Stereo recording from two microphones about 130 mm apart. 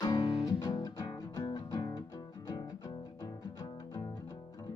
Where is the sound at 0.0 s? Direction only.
30° left (ahead or behind).